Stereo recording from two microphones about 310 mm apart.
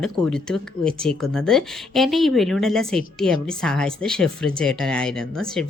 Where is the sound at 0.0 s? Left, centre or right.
Centre.